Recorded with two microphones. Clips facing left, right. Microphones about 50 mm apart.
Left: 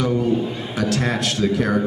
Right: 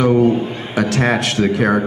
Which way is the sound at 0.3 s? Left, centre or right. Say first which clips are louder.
Right 2 dB; right.